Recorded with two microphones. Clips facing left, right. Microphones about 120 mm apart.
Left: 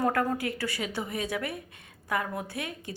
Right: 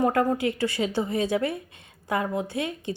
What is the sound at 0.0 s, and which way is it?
A woman's voice, 20° right (ahead or behind).